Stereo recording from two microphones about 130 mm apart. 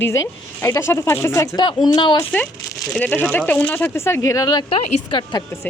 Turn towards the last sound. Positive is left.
turn(degrees=40)  # may be behind; listen again after turning